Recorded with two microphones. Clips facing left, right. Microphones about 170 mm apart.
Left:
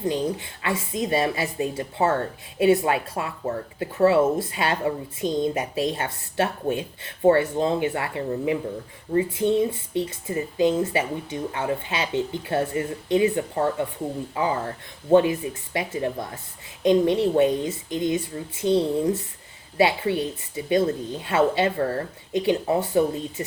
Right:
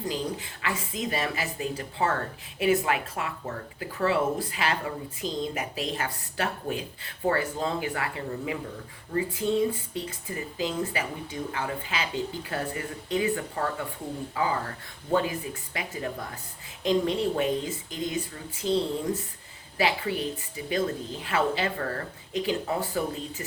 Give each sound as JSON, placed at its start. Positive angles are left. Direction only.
{"t": 0.0, "sound": "speech", "side_deg": 25}